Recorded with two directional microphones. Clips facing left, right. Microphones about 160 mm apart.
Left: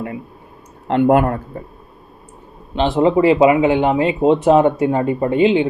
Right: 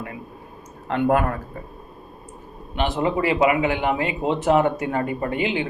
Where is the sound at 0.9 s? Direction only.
30° left (ahead or behind).